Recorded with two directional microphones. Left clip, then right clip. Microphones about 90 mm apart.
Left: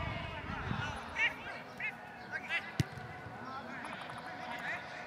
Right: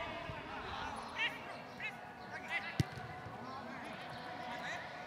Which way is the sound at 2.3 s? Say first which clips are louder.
Left 3 dB; 5° left (ahead or behind).